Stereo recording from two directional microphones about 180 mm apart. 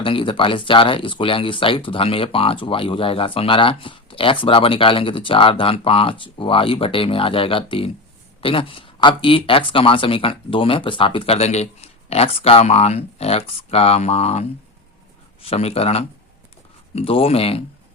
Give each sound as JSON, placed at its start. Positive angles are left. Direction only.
{"t": 0.0, "sound": "speech", "side_deg": 30}